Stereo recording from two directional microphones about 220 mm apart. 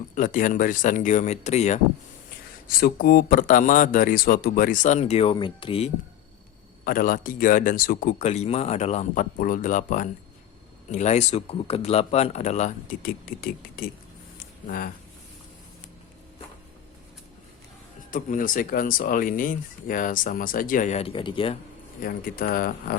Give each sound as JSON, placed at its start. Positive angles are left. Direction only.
{"t": 0.2, "sound": "speech", "side_deg": 40}
{"t": 2.6, "sound": "speech", "side_deg": 40}
{"t": 6.8, "sound": "speech", "side_deg": 40}
{"t": 18.1, "sound": "speech", "side_deg": 35}
{"t": 22.0, "sound": "speech", "side_deg": 40}